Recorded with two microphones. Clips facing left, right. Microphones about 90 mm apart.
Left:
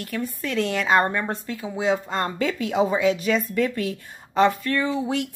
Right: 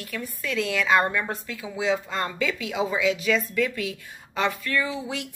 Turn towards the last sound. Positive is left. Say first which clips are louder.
# left 5 dB
turn(degrees=45)  # may be behind; listen again after turning